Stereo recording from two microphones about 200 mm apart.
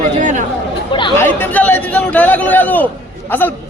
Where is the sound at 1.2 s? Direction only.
10° left (ahead or behind).